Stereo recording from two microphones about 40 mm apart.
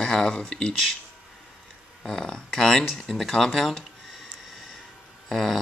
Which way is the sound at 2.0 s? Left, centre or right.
Centre.